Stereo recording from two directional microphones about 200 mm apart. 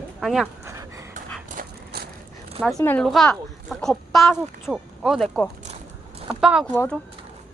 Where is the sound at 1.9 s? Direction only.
55° right (ahead or behind).